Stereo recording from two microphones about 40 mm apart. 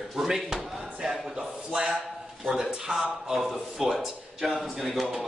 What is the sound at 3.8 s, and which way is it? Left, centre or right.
Speech, centre.